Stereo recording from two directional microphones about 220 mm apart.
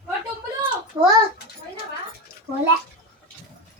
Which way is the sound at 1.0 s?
20° right (ahead or behind).